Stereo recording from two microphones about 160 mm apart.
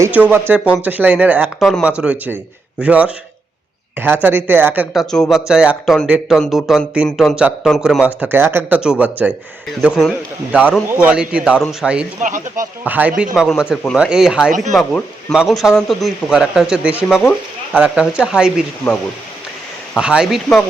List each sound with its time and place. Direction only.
0.0 s speech: 10° right (ahead or behind)
1.5 s speech: centre (ahead or behind)
5.1 s speech: centre (ahead or behind)
12.2 s speech: 55° right (ahead or behind)
12.8 s speech: 10° right (ahead or behind)
19.9 s speech: 5° right (ahead or behind)